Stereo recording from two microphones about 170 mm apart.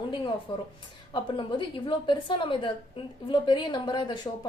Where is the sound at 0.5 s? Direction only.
30° left (ahead or behind).